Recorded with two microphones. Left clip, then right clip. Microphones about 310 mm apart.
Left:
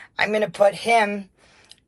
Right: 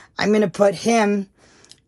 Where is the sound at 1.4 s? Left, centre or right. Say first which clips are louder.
Right 1 dB; right.